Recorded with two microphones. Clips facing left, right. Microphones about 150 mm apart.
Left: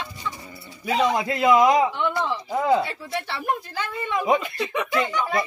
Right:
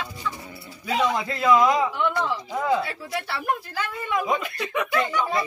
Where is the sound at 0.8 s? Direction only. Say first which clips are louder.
Left 2 dB; 10° left (ahead or behind).